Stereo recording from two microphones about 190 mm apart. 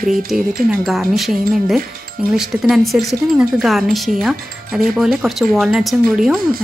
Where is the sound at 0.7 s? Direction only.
Centre (ahead or behind).